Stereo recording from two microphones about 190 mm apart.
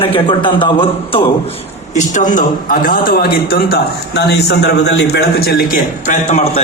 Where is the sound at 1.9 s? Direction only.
40° left (ahead or behind).